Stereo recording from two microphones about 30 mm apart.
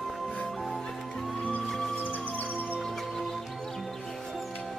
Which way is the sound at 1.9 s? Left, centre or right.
Left.